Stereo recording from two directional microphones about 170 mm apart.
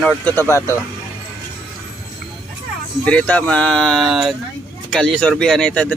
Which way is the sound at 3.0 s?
10° left (ahead or behind).